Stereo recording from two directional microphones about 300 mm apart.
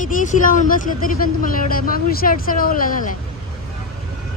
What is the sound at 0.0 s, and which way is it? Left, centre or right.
Speech, left.